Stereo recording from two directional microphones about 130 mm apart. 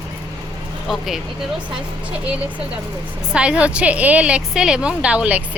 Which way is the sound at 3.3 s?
10° right (ahead or behind).